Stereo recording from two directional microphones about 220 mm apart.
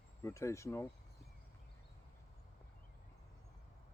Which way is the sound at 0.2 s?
15° left (ahead or behind).